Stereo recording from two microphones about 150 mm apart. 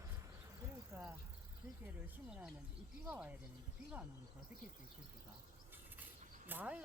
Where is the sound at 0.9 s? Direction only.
15° right (ahead or behind).